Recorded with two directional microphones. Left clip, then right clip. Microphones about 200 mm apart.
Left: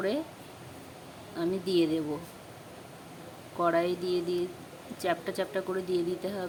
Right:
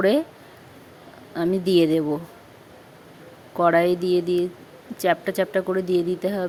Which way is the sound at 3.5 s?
35° right (ahead or behind).